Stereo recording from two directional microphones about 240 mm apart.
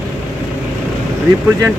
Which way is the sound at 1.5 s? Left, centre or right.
Centre.